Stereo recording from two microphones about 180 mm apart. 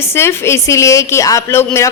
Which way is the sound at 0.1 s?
15° left (ahead or behind).